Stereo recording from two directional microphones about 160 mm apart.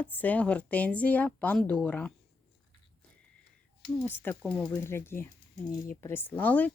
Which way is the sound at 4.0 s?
10° left (ahead or behind).